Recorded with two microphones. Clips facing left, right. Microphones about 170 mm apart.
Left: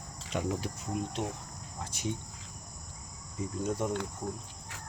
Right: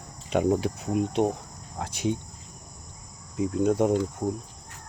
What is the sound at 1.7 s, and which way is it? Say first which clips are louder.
Speech: right 8 dB; 90° right.